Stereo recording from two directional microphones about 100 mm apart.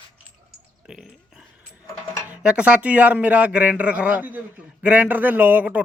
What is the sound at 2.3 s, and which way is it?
A man's voice, 10° right (ahead or behind).